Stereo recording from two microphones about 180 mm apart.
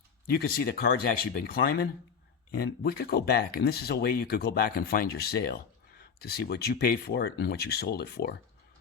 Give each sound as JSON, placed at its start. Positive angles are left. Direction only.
{"t": 0.3, "sound": "speech", "side_deg": 60}